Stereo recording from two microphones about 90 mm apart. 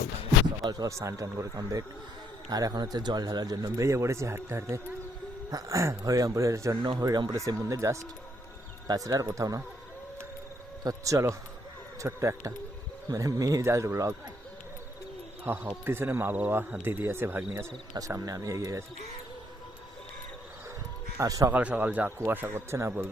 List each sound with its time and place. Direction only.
0.6 s speech: 45° right (ahead or behind)
5.5 s speech: 40° right (ahead or behind)
7.0 s speech: 45° right (ahead or behind)
10.8 s speech: 35° right (ahead or behind)
13.1 s speech: 40° right (ahead or behind)
15.4 s speech: 20° right (ahead or behind)
18.1 s speech: 40° right (ahead or behind)
21.2 s speech: 40° right (ahead or behind)
21.5 s a man's voice: 15° right (ahead or behind)